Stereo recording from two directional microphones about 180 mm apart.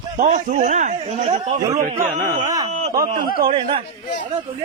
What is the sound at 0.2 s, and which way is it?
A man's voice, 45° right (ahead or behind).